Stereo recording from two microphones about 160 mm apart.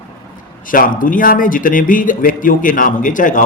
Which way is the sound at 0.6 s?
60° left (ahead or behind).